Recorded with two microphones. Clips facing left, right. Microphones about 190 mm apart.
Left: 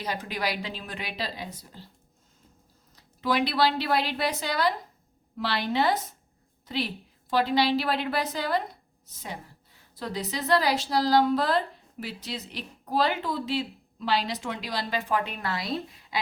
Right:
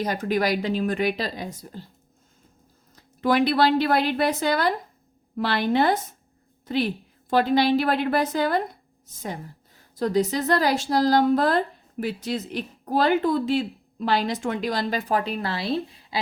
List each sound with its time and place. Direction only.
0.0 s speech: 45° right (ahead or behind)
2.9 s speech: 50° right (ahead or behind); by 16.1 s 30° right (ahead or behind)